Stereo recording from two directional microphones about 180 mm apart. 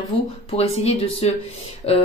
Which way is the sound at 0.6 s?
35° left (ahead or behind).